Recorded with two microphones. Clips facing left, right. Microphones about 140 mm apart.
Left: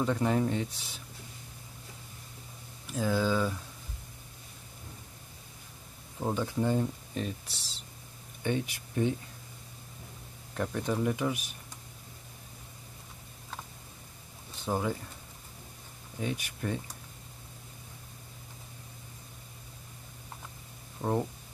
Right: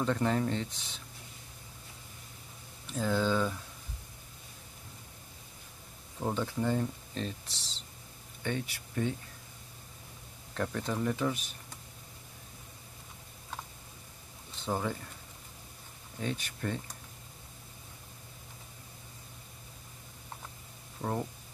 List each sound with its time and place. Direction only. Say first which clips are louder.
0.0 s speech: left 2 dB; 10° left (ahead or behind)
2.9 s speech: left 1 dB; 5° left (ahead or behind)
6.1 s speech: left 2 dB; 10° left (ahead or behind)
10.5 s speech: left 2 dB; 10° left (ahead or behind)
14.6 s speech: left 2 dB; 10° left (ahead or behind)
16.2 s speech: left 1 dB; 10° left (ahead or behind)
21.0 s speech: left 4 dB; 25° left (ahead or behind)